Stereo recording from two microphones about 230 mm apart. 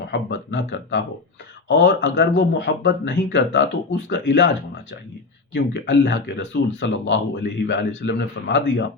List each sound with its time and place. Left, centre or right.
0.1 s speech: left
5.5 s speech: left